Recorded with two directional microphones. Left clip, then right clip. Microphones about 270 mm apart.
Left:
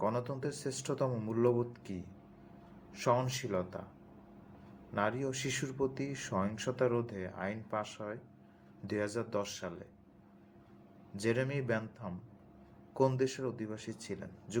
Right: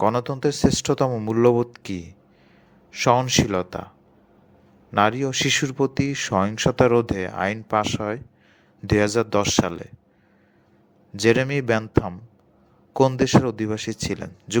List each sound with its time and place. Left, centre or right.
0.0 s speech: right
4.9 s speech: right
11.2 s speech: right